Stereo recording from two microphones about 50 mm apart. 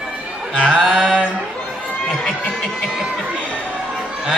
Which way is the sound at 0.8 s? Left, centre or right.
Centre.